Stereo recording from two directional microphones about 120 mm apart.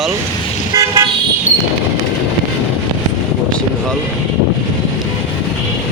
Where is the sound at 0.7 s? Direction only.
30° right (ahead or behind).